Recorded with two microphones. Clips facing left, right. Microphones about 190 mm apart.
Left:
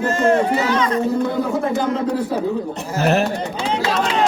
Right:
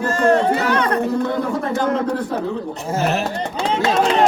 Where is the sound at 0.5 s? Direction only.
60° right (ahead or behind).